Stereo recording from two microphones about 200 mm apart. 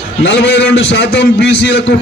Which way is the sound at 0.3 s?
60° left (ahead or behind).